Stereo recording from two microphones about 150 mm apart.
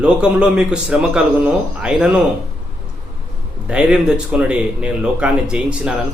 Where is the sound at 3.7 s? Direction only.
5° right (ahead or behind).